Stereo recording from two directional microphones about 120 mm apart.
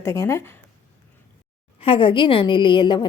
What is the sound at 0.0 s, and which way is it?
Speech, 25° left (ahead or behind).